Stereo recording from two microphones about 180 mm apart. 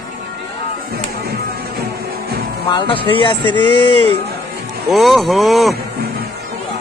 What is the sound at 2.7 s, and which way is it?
Speech, 25° left (ahead or behind).